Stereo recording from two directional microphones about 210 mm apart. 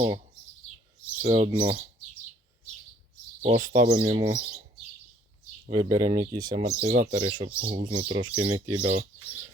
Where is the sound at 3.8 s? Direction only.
20° right (ahead or behind).